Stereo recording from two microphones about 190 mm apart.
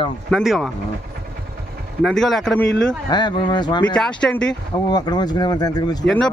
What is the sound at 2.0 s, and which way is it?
Speech, centre (ahead or behind).